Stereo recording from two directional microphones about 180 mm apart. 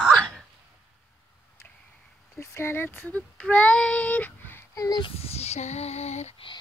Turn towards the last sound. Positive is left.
turn(degrees=35)  # may be behind; listen again after turning